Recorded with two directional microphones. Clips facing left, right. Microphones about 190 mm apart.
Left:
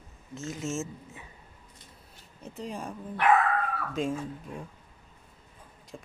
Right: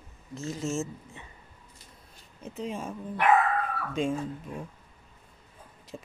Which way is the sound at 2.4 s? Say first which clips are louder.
Right 3 dB; centre (ahead or behind).